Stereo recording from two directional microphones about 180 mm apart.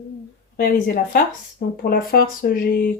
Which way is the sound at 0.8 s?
55° left (ahead or behind).